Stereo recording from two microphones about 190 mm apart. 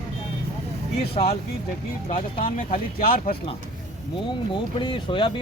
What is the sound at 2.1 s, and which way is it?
Speech, 45° left (ahead or behind).